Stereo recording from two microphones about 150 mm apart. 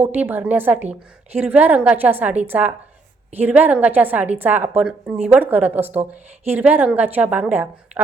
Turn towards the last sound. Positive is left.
turn(degrees=-10)  # may be behind; listen again after turning